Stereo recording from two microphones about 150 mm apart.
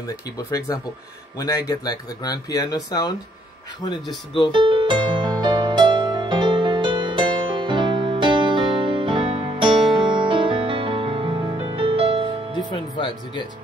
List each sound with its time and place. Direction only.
0.4 s speech: 20° left (ahead or behind)
4.5 s music: 30° right (ahead or behind)
12.7 s music: 30° left (ahead or behind)